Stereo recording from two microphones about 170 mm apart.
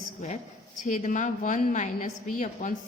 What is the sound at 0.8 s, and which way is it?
A woman's voice, 50° left (ahead or behind).